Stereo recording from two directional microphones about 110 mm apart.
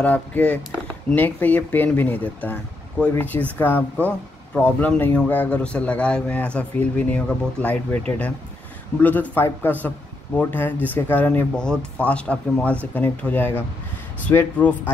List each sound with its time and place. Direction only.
0.0 s speech: 15° left (ahead or behind)
9.0 s speech: 15° left (ahead or behind)